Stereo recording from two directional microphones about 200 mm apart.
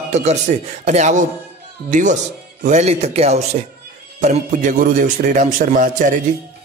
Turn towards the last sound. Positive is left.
turn(degrees=-40)  # may be behind; listen again after turning